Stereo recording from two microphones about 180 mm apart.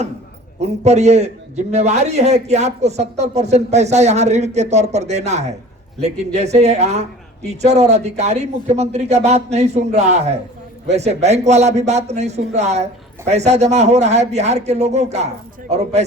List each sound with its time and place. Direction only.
0.6 s a man's voice: 40° right (ahead or behind)